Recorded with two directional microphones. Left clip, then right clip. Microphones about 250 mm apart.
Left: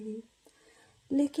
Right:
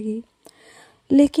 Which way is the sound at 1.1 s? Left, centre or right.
Right.